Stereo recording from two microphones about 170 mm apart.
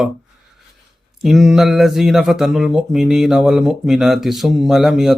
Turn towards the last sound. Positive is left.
turn(degrees=0)  # may be behind; listen again after turning